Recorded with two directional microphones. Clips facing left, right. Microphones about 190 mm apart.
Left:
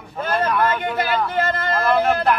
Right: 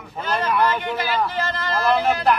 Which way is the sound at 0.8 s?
55° left (ahead or behind).